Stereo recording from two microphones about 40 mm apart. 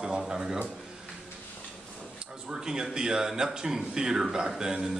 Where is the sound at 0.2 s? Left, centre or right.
Centre.